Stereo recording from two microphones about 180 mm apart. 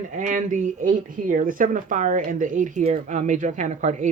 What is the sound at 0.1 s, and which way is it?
Speech, 45° right (ahead or behind).